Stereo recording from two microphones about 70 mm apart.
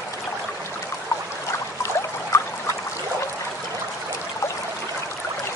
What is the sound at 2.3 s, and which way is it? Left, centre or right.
Trickle, left.